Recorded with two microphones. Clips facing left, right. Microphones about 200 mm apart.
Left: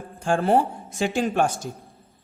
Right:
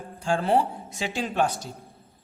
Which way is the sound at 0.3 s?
50° left (ahead or behind).